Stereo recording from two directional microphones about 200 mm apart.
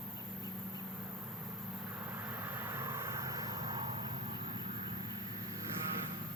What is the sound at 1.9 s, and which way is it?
Vehicle, 10° right (ahead or behind).